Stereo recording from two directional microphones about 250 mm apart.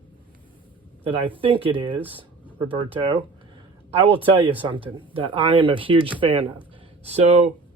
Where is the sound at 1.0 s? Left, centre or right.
Right.